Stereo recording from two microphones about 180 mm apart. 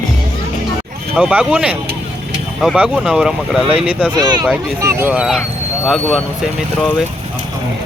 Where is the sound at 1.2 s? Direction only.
5° right (ahead or behind).